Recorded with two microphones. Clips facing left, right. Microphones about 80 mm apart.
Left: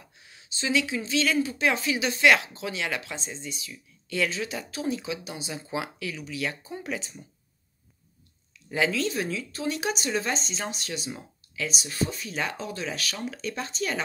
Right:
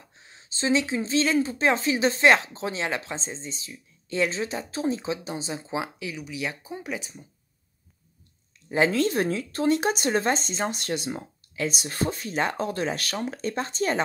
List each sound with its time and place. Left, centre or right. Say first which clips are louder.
0.2 s speech: right 4 dB; right; by 7.2 s centre
8.7 s speech: right 4 dB; right